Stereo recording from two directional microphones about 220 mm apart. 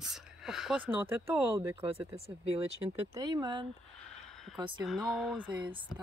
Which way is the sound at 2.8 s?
20° right (ahead or behind).